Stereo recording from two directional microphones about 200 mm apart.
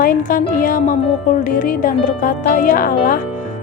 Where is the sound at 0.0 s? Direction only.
45° left (ahead or behind).